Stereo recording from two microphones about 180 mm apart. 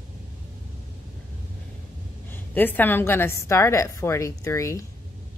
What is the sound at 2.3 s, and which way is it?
Speech, 10° left (ahead or behind).